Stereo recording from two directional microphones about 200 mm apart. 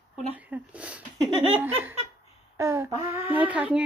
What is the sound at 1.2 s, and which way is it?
Laughter, 25° right (ahead or behind).